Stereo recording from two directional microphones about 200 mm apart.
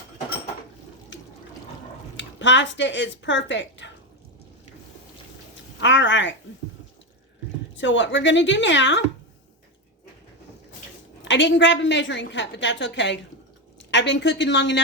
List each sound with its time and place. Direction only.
2.1 s speech: 65° left (ahead or behind)
5.8 s a woman's voice: 65° left (ahead or behind)
7.8 s a woman's voice: 65° left (ahead or behind)
11.2 s a woman's voice: 65° left (ahead or behind)